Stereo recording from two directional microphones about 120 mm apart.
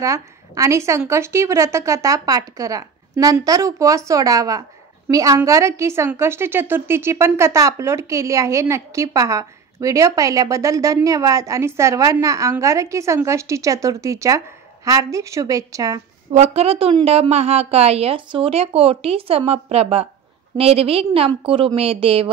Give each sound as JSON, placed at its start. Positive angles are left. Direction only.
{"t": 0.0, "sound": "a woman's voice", "side_deg": -25}
{"t": 16.3, "sound": "a woman's voice", "side_deg": -70}